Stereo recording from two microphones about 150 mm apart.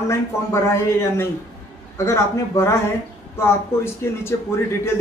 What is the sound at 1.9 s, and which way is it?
Speech, 20° left (ahead or behind).